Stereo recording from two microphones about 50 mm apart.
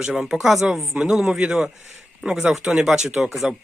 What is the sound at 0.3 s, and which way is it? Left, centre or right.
Speech, centre.